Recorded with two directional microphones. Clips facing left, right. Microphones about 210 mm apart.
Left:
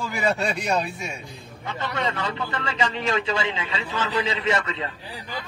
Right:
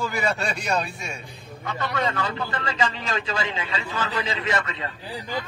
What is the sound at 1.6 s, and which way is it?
A man's voice, 25° left (ahead or behind).